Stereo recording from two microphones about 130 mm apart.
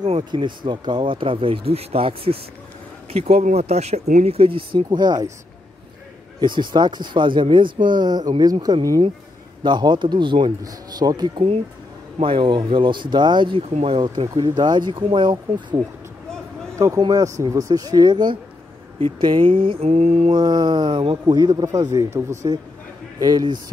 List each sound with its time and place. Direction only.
0.2 s speech: 35° right (ahead or behind)
4.8 s speech: 30° right (ahead or behind)
6.4 s speech: 35° right (ahead or behind)
9.6 s speech: 35° right (ahead or behind)
16.7 s speech: 25° right (ahead or behind); by 19.9 s 40° right (ahead or behind)
19.9 s speech: 55° right (ahead or behind)
20.3 s speech: 35° right (ahead or behind)